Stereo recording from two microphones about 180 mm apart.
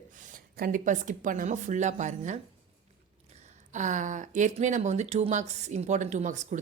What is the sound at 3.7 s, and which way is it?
A woman's voice, 45° right (ahead or behind).